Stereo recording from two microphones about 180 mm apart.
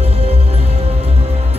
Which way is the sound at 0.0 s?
35° right (ahead or behind).